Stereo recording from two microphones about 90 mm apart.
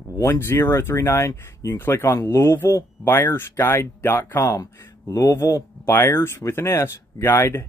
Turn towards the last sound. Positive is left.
turn(degrees=25)  # may be behind; listen again after turning